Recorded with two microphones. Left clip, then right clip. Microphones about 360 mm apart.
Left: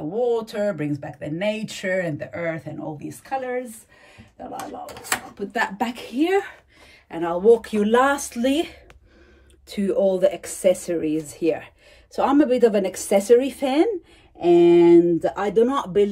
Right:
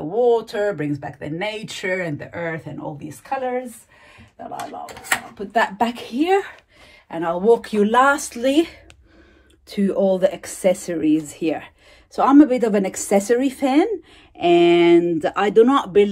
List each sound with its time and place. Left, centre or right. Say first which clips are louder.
0.1 s speech: right 5 dB; centre
4.8 s speech: right 5 dB; centre
14.6 s speech: left 1 dB; right